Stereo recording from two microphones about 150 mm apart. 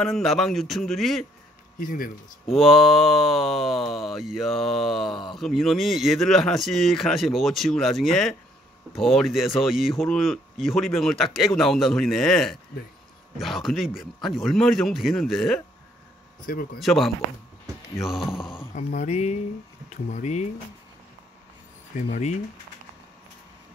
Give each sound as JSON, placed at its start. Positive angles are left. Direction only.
{"t": 0.0, "sound": "speech", "side_deg": 0}
{"t": 1.8, "sound": "speech", "side_deg": 65}
{"t": 2.5, "sound": "speech", "side_deg": 0}
{"t": 16.4, "sound": "speech", "side_deg": 80}
{"t": 16.8, "sound": "speech", "side_deg": 0}
{"t": 19.0, "sound": "speech", "side_deg": 50}